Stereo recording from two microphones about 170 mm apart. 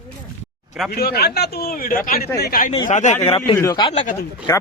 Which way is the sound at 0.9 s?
65° left (ahead or behind).